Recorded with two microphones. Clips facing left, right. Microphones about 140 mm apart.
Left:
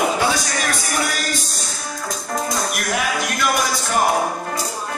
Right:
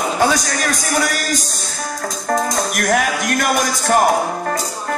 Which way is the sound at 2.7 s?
50° right (ahead or behind).